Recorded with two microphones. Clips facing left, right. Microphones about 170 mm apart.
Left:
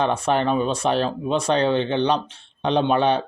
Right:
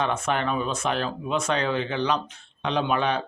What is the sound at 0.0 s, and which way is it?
Speech, 35° left (ahead or behind).